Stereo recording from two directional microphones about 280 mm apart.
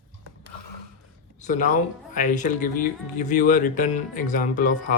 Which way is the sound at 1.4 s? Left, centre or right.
Left.